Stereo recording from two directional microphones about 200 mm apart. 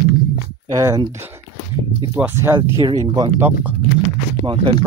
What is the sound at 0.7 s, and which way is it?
Speech, 15° right (ahead or behind).